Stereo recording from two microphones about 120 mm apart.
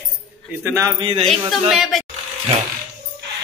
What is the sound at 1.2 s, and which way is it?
Speech, centre (ahead or behind).